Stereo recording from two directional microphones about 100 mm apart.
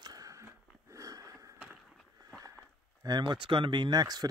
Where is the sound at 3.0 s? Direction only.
45° right (ahead or behind).